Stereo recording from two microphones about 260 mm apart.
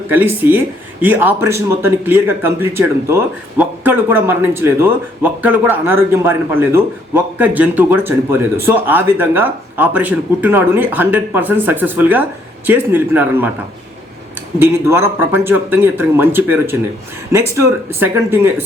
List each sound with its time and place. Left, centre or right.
0.1 s a man's voice: centre
14.6 s a man's voice: centre